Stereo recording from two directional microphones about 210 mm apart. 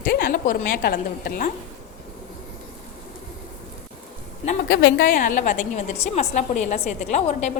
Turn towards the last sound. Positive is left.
turn(degrees=35)  # may be behind; listen again after turning